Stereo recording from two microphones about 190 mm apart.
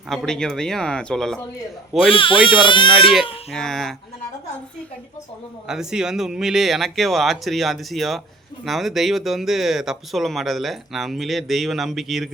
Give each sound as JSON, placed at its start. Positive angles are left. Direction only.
{"t": 0.1, "sound": "speech", "side_deg": 0}
{"t": 2.0, "sound": "speech", "side_deg": 25}
{"t": 3.5, "sound": "speech", "side_deg": 0}
{"t": 5.6, "sound": "speech", "side_deg": -5}